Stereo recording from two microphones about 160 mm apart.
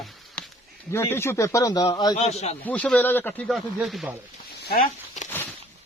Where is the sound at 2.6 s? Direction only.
10° left (ahead or behind).